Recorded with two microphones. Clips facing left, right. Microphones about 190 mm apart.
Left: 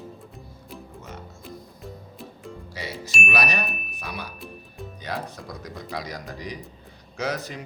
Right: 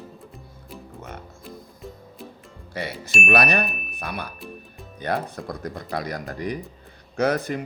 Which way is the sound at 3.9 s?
55° right (ahead or behind).